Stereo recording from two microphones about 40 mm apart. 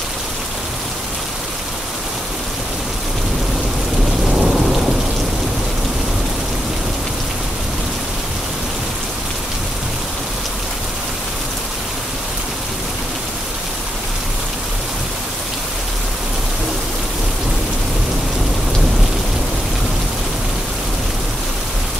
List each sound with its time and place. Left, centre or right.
4.3 s rain: centre